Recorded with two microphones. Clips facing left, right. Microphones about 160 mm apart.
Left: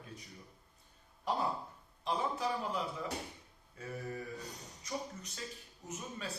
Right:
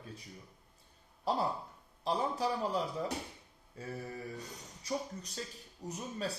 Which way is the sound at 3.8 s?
35° right (ahead or behind).